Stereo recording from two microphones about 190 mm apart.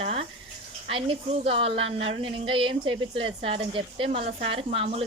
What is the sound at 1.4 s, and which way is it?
Speech, 30° right (ahead or behind).